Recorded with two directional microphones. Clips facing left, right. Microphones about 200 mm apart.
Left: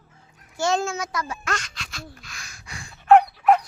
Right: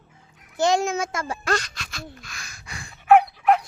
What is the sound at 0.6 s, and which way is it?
A woman's voice, 15° right (ahead or behind).